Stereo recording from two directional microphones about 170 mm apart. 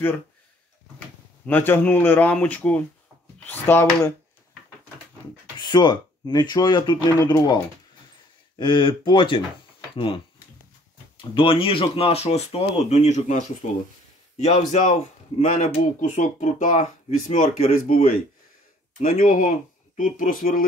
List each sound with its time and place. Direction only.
0.9 s speech: 10° left (ahead or behind)
5.6 s speech: 25° left (ahead or behind)
8.5 s speech: 30° left (ahead or behind); by 17.9 s 45° left (ahead or behind)
18.9 s speech: 55° left (ahead or behind)